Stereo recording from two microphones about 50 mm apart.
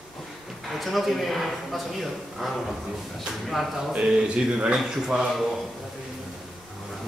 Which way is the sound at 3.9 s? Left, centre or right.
Centre.